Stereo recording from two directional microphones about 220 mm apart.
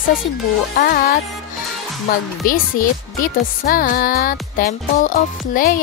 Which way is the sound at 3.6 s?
40° left (ahead or behind).